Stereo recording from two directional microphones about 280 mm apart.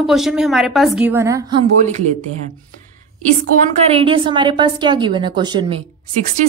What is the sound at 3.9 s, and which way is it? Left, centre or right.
A woman's voice, centre.